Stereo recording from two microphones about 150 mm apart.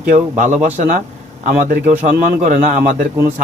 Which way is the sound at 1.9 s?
55° right (ahead or behind).